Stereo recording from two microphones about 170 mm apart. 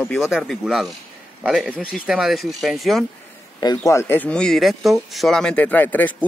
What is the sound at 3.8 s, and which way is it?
Speech, 15° left (ahead or behind).